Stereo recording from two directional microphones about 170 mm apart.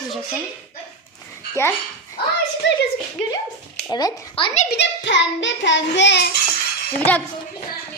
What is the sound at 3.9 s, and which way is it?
Speech, 25° left (ahead or behind).